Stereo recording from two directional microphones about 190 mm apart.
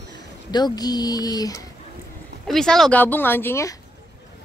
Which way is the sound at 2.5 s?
Centre (ahead or behind).